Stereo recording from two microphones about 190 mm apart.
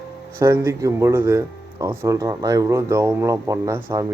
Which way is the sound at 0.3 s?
15° right (ahead or behind).